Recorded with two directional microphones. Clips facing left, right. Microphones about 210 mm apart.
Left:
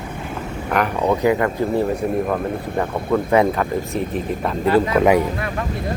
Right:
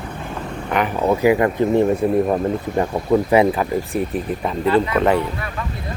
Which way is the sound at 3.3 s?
5° right (ahead or behind).